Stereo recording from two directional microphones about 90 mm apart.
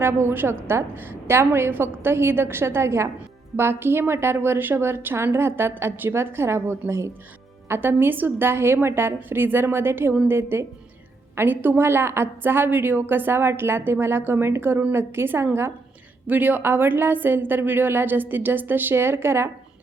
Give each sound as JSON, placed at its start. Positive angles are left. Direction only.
{"t": 0.0, "sound": "a woman's voice", "side_deg": -30}